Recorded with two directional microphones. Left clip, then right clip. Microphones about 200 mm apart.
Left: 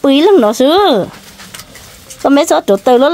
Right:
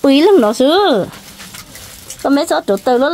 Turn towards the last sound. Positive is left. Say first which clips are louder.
# left 4 dB
turn(degrees=15)  # may be behind; listen again after turning